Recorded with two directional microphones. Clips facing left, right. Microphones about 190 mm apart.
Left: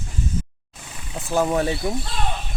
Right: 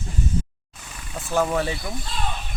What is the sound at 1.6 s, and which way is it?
Speech, 30° left (ahead or behind).